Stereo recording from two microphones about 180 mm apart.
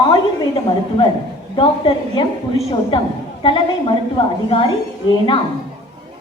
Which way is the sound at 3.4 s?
30° left (ahead or behind).